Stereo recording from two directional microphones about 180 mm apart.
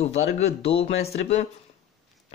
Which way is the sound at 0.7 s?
35° left (ahead or behind).